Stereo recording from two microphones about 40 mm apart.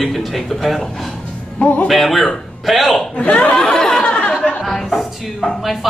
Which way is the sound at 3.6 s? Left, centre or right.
Centre.